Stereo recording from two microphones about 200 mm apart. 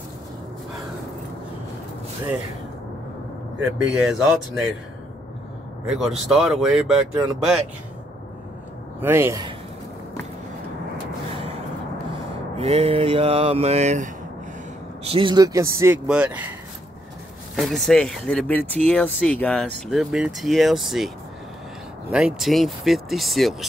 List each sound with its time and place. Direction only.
3.7 s speech: centre (ahead or behind)
5.9 s speech: centre (ahead or behind)
9.0 s speech: 10° right (ahead or behind)
12.1 s mantra: 30° right (ahead or behind)
15.0 s speech: 25° right (ahead or behind); by 16.4 s 5° right (ahead or behind)
17.6 s speech: centre (ahead or behind)
22.1 s speech: centre (ahead or behind)